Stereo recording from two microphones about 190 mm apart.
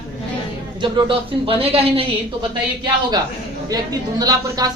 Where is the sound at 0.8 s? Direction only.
25° right (ahead or behind).